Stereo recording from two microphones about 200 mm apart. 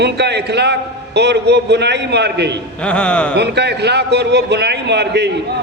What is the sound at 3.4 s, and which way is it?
A man's voice, 55° right (ahead or behind).